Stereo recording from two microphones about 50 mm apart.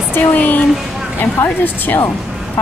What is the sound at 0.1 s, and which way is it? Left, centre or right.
Speech, left.